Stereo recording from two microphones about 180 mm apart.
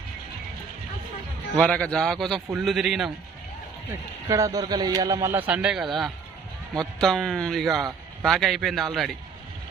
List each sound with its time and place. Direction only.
1.5 s speech: 5° left (ahead or behind)
3.8 s a man's voice: 15° right (ahead or behind); by 9.1 s centre (ahead or behind)